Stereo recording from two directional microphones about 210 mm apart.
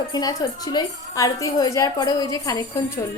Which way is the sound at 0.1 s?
20° left (ahead or behind).